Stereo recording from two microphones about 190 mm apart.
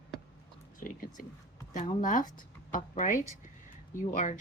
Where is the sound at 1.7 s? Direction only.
40° left (ahead or behind).